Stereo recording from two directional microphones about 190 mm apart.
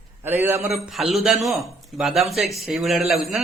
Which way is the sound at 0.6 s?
Centre (ahead or behind).